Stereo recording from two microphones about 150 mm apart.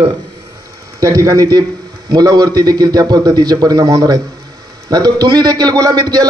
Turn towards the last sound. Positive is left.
turn(degrees=-25)  # may be behind; listen again after turning